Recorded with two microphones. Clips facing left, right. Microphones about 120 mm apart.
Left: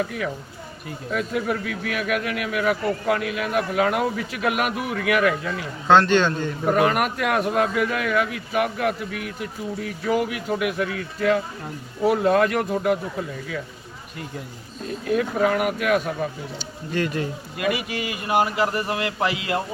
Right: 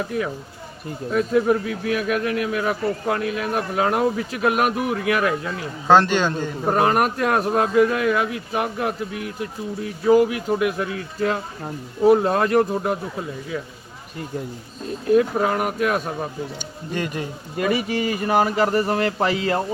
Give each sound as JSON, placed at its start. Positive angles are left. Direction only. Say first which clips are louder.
{"t": 1.1, "sound": "speech", "louder": "right 6 dB", "side_deg": -35}
{"t": 5.9, "sound": "a man's voice", "louder": "even", "side_deg": -10}
{"t": 6.7, "sound": "speech", "louder": "right 1 dB", "side_deg": -35}
{"t": 15.0, "sound": "speech", "louder": "right 3 dB", "side_deg": -30}
{"t": 16.9, "sound": "a man's voice", "louder": "left 2 dB", "side_deg": -20}
{"t": 17.6, "sound": "speech", "louder": "right 4 dB", "side_deg": -40}